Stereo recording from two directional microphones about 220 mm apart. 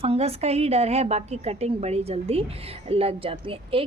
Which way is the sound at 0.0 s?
25° right (ahead or behind).